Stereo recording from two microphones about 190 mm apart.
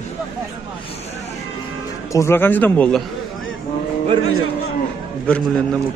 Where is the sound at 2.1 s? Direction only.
10° left (ahead or behind).